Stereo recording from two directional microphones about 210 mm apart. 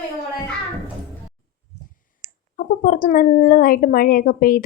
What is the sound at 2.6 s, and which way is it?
Speech, 40° left (ahead or behind).